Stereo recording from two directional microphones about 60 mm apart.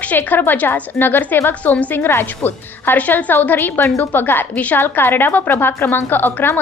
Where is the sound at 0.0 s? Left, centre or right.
Left.